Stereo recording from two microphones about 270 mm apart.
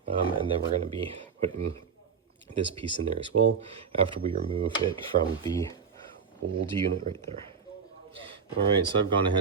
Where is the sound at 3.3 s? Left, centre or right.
Right.